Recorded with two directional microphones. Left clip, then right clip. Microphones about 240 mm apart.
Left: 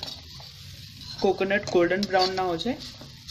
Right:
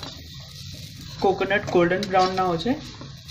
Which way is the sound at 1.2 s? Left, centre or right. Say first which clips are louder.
Right 3 dB; left.